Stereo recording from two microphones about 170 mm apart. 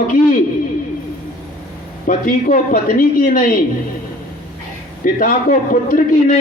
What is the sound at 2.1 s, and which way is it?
A man's voice, 50° left (ahead or behind).